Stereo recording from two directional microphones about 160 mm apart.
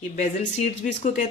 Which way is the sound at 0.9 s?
50° left (ahead or behind).